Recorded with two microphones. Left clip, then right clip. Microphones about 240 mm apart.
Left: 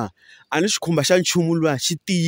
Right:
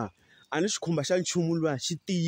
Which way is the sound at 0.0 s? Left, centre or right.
Left.